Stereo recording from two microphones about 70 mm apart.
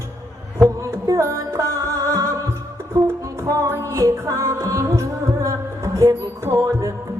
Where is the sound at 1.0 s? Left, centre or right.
Right.